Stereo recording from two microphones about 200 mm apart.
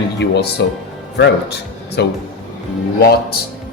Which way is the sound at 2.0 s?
55° left (ahead or behind).